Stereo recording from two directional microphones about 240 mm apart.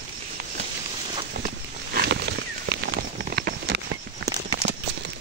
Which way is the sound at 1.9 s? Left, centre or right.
Right.